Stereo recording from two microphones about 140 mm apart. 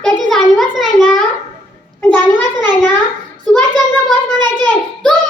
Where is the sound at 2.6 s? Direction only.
30° right (ahead or behind).